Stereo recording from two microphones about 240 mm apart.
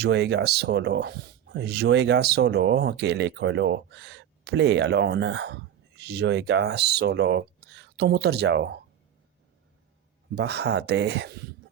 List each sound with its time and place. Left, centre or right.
0.0 s speech: right
10.3 s speech: right